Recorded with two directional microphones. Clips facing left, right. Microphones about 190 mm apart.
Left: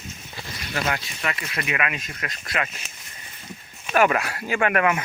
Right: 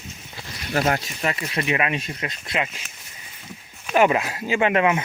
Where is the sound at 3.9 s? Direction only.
20° right (ahead or behind).